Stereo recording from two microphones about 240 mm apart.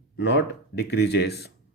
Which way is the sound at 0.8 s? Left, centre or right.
Left.